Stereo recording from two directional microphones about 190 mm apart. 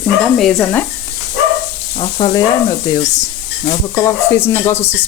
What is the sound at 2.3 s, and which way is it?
Sizzle, 20° left (ahead or behind).